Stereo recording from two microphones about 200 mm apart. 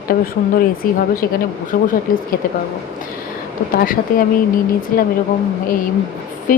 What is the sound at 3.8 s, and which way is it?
Speech, 45° left (ahead or behind).